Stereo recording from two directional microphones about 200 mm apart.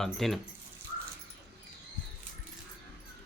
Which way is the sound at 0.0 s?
Centre (ahead or behind).